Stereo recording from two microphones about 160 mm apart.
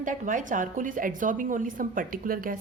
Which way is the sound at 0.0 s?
55° right (ahead or behind).